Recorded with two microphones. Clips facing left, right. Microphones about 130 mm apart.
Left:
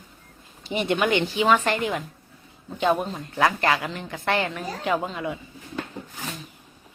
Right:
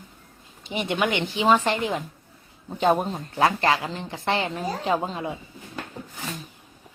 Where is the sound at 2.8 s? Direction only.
40° right (ahead or behind).